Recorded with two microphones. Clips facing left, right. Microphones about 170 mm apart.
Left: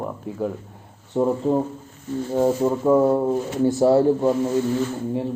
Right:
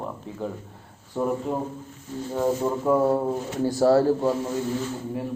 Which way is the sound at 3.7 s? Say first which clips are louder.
Left 2 dB; 20° left (ahead or behind).